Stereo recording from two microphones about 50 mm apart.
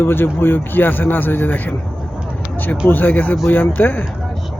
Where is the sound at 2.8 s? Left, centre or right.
Left.